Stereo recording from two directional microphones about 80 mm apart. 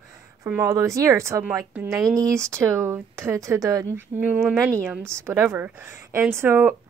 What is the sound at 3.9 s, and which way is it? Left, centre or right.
A woman's voice, right.